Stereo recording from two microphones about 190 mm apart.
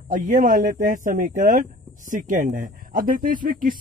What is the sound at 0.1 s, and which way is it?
Speech, 45° right (ahead or behind).